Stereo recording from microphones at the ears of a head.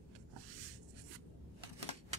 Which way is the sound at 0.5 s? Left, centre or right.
Right.